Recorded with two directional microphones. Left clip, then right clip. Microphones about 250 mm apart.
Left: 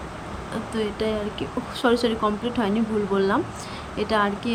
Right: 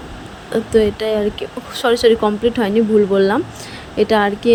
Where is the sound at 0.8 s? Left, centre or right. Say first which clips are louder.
Right 9 dB; centre.